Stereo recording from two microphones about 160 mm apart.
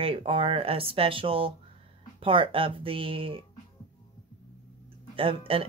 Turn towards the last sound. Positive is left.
turn(degrees=-35)  # may be behind; listen again after turning